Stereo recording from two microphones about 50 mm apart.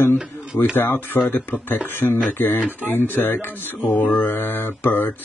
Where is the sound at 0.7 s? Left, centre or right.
Left.